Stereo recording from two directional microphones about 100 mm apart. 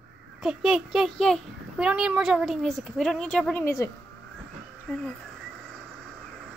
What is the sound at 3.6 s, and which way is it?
Speech, 30° left (ahead or behind).